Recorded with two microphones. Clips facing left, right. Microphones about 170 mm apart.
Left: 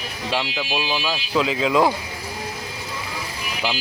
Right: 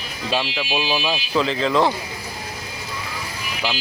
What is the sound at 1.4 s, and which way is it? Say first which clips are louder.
Speech: left 1 dB; 5° left (ahead or behind).